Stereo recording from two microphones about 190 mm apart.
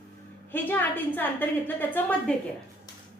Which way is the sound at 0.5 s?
10° left (ahead or behind).